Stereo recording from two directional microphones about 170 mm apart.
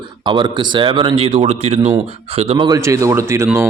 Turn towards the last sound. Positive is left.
turn(degrees=-15)  # may be behind; listen again after turning